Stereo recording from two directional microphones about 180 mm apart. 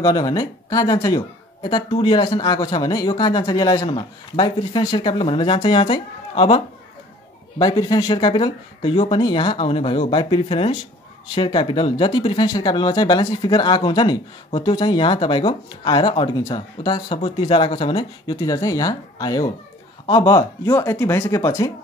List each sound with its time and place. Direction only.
0.0 s speech: 20° left (ahead or behind)